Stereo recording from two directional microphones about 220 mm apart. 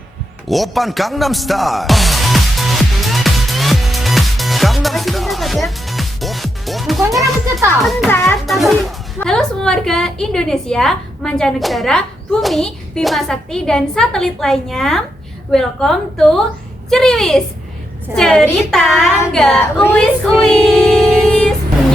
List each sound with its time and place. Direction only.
0.4 s music: centre (ahead or behind)
7.0 s a woman's voice: centre (ahead or behind)
8.1 s speech: 10° left (ahead or behind)
8.4 s music: centre (ahead or behind)
9.2 s a woman's voice: centre (ahead or behind)
20.4 s child singing: centre (ahead or behind)